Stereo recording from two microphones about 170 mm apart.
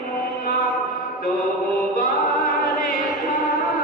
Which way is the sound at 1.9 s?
50° left (ahead or behind).